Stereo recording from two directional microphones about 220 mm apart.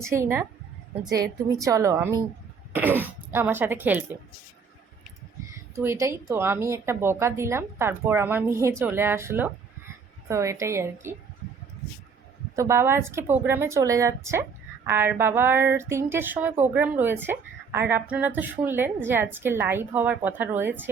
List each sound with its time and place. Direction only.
0.1 s a woman's voice: 10° right (ahead or behind)
5.7 s a woman's voice: 10° right (ahead or behind)
12.5 s a woman's voice: 10° right (ahead or behind)